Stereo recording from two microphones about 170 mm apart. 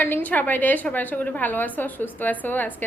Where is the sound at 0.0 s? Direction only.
10° left (ahead or behind).